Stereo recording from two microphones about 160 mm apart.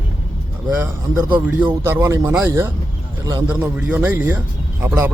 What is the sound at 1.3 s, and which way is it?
Speech, 15° right (ahead or behind).